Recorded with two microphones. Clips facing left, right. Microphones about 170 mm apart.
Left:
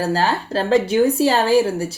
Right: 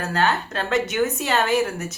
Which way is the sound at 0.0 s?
35° left (ahead or behind).